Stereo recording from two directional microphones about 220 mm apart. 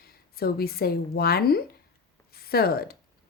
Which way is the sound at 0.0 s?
45° left (ahead or behind).